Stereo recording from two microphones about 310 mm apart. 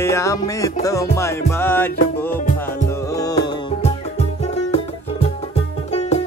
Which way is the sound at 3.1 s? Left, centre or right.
Centre.